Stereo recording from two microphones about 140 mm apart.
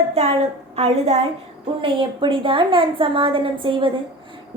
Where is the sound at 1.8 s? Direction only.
35° right (ahead or behind).